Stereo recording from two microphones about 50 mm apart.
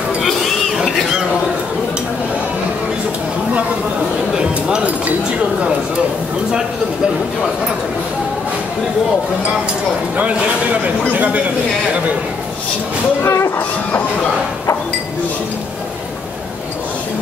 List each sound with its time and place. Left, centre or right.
0.2 s a sound: centre
4.4 s chink: centre
10.1 s speech: right
13.2 s speech: left